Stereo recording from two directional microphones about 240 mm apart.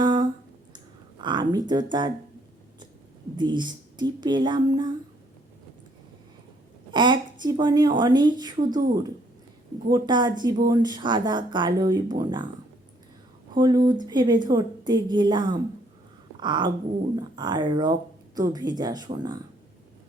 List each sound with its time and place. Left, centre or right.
0.0 s a sound: centre
1.2 s a woman's voice: centre
3.3 s a woman's voice: centre
6.9 s a woman's voice: centre
13.5 s a woman's voice: centre